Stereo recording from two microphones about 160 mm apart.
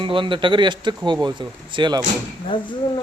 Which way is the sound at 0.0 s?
30° right (ahead or behind).